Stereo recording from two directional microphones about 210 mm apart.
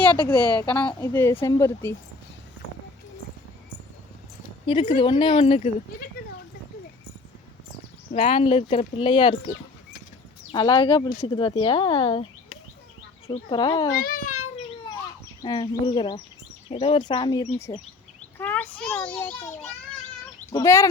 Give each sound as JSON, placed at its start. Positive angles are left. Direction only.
{"t": 0.3, "sound": "a woman's voice", "side_deg": -20}
{"t": 0.6, "sound": "a child's voice", "side_deg": 5}
{"t": 4.6, "sound": "speech", "side_deg": 25}
{"t": 8.1, "sound": "speech", "side_deg": 25}
{"t": 10.5, "sound": "speech", "side_deg": 20}
{"t": 13.2, "sound": "speech", "side_deg": 25}
{"t": 13.9, "sound": "speech", "side_deg": 45}
{"t": 15.4, "sound": "speech", "side_deg": 20}
{"t": 18.3, "sound": "a child's voice", "side_deg": 10}